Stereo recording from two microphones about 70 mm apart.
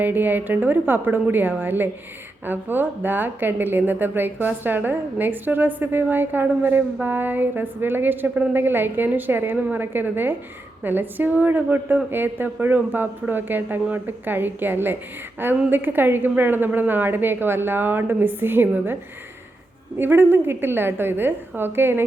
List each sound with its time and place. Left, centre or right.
0.0 s a woman's voice: right
9.8 s a woman's voice: right
20.0 s a woman's voice: right